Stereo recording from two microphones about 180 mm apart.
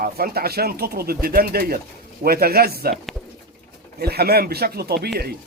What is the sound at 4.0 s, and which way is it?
Speech, 60° right (ahead or behind).